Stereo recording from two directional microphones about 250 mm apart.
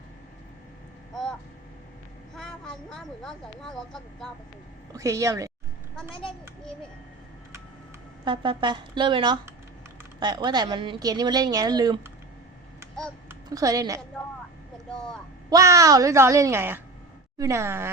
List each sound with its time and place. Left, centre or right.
1.1 s vehicle: centre
2.3 s speech: centre
4.9 s a woman's voice: centre
8.2 s a woman's voice: centre
13.2 s a woman's voice: centre
15.4 s a woman's voice: centre